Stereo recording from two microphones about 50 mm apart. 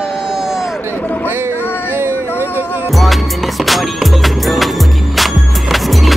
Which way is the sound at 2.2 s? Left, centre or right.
Left.